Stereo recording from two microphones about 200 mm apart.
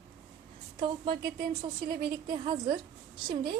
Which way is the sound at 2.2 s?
20° right (ahead or behind).